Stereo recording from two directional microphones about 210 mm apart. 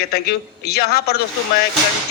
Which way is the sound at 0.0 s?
50° left (ahead or behind).